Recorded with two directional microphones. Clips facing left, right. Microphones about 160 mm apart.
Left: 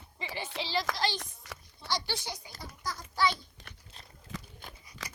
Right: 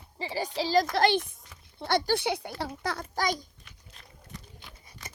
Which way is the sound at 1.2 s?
70° left (ahead or behind).